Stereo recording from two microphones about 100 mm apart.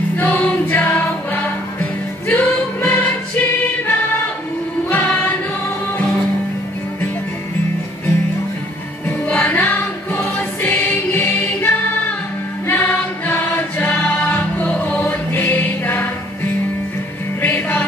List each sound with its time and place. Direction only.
0.2 s music: 15° left (ahead or behind)
9.3 s music: 20° left (ahead or behind)
12.6 s choir: 20° left (ahead or behind)
17.4 s music: 20° left (ahead or behind)